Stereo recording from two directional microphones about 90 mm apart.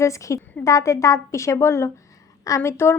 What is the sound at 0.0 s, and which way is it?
A woman's voice, 35° left (ahead or behind).